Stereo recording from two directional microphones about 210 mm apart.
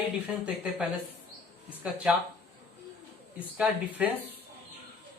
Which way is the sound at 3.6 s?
5° right (ahead or behind).